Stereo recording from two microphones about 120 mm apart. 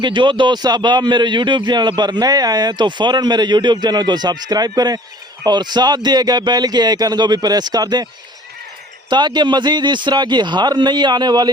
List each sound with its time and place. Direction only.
0.0 s a man's voice: 40° right (ahead or behind)
9.0 s a man's voice: 40° right (ahead or behind)